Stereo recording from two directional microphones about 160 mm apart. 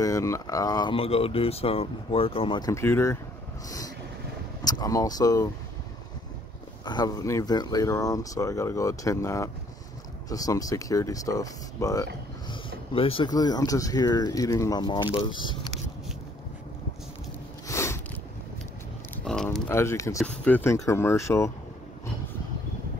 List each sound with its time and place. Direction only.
0.0 s speech: 20° left (ahead or behind)
0.9 s speech: 35° left (ahead or behind)
2.7 s speech: 15° left (ahead or behind)
6.8 s speech: 25° left (ahead or behind)
12.4 s speech: 35° left (ahead or behind)
17.6 s a sound: 15° left (ahead or behind)
19.1 s a sound: 5° left (ahead or behind)
19.7 s speech: 15° left (ahead or behind)